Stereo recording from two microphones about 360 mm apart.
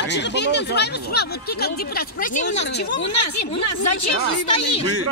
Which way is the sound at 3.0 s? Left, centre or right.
Left.